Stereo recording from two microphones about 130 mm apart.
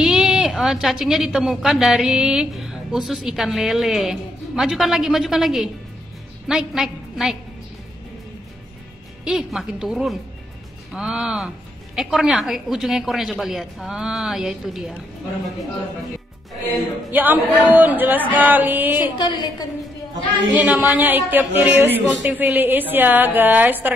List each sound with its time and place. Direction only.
0.0 s a woman's voice: 5° right (ahead or behind)
9.2 s a woman's voice: 5° right (ahead or behind)
17.1 s a man's voice: 15° right (ahead or behind)
19.1 s a woman's voice: 35° left (ahead or behind)
20.6 s a man's voice: 10° right (ahead or behind)